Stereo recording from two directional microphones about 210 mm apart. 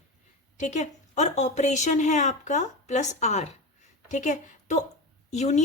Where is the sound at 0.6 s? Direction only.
35° left (ahead or behind).